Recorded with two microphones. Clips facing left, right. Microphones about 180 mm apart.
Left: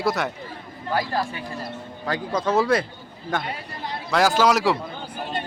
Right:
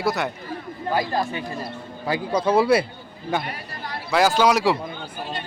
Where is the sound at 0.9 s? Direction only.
20° right (ahead or behind).